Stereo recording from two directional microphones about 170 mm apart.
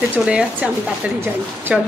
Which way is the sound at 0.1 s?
5° right (ahead or behind).